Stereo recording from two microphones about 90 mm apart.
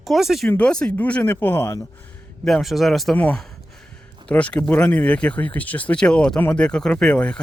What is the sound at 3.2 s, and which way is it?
Speech, 15° left (ahead or behind).